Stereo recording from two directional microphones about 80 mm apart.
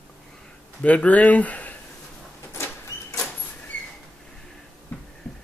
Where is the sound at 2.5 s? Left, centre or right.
Left.